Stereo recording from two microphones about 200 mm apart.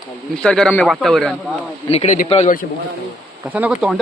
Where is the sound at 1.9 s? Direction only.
35° left (ahead or behind).